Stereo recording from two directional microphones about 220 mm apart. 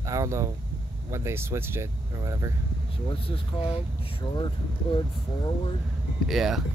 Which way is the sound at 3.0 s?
25° left (ahead or behind).